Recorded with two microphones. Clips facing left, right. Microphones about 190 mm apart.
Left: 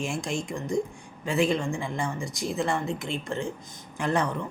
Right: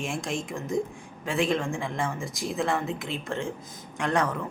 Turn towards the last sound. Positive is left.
turn(degrees=0)  # may be behind; listen again after turning